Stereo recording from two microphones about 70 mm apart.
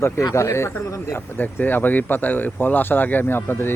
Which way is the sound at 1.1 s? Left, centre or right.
Left.